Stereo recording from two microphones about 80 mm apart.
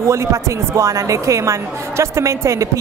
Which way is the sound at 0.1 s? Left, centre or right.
Right.